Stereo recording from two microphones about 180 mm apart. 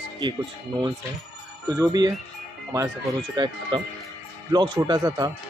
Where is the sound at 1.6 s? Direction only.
20° right (ahead or behind).